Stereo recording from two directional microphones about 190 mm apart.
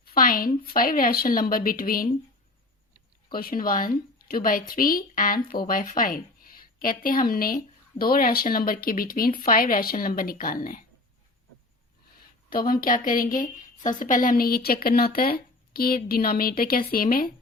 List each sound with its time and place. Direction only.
0.0 s a woman's voice: 50° left (ahead or behind)
3.3 s a woman's voice: 50° left (ahead or behind)
12.5 s a woman's voice: 50° left (ahead or behind)